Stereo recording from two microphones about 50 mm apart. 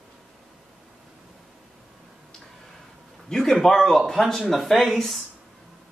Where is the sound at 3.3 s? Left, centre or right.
Centre.